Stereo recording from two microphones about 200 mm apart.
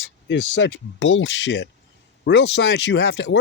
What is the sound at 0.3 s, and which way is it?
Speech, 65° left (ahead or behind).